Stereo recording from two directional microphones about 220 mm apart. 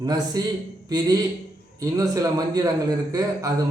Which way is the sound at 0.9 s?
15° right (ahead or behind).